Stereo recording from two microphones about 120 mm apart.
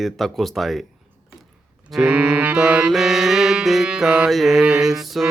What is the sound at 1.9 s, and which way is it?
Music, 10° right (ahead or behind).